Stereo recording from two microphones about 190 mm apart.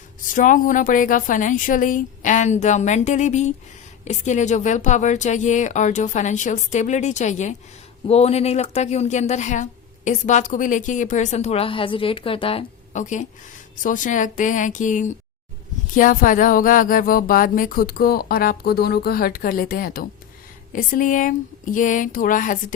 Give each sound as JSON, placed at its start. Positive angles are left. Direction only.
{"t": 0.3, "sound": "speech", "side_deg": 45}